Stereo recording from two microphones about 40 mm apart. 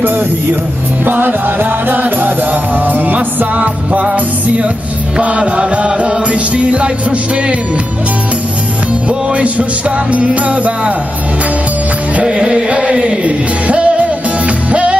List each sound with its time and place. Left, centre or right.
1.0 s music: right
5.2 s music: right
9.3 s music: right
12.2 s music: right